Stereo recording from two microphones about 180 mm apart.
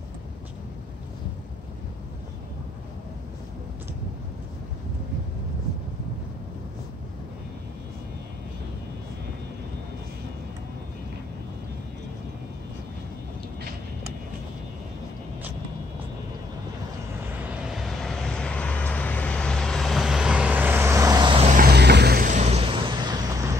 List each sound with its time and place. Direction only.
17.6 s vehicle: centre (ahead or behind); by 21.5 s 25° right (ahead or behind)
21.5 s vehicle: 55° right (ahead or behind); by 23.4 s 25° right (ahead or behind)